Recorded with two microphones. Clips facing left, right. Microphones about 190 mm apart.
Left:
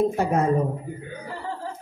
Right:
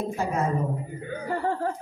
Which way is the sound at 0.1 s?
60° left (ahead or behind).